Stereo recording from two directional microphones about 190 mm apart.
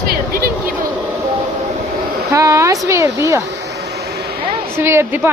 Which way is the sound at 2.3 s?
15° right (ahead or behind).